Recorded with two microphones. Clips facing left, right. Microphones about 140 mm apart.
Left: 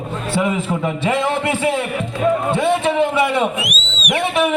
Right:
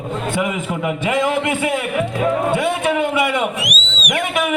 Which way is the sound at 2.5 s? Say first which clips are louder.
Left 1 dB; 25° left (ahead or behind).